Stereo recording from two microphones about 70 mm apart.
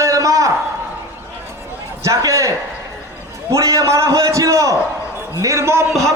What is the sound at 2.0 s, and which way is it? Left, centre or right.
A man's voice, right.